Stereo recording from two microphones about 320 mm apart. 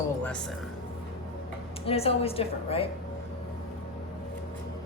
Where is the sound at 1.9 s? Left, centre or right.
Centre.